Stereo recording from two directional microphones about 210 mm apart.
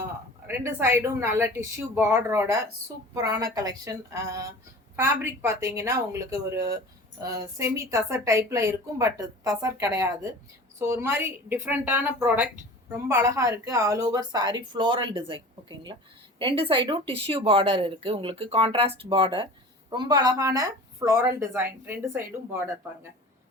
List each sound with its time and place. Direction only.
0.4 s a woman's voice: 10° right (ahead or behind)
16.4 s a woman's voice: 25° right (ahead or behind)